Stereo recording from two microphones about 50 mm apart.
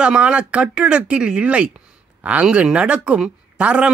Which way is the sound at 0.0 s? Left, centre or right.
Right.